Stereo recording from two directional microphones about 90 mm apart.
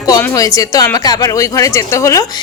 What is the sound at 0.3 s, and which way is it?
A woman's voice, 40° left (ahead or behind).